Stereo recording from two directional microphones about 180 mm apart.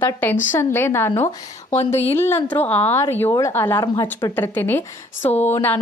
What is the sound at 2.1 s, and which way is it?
A woman's voice, 15° left (ahead or behind).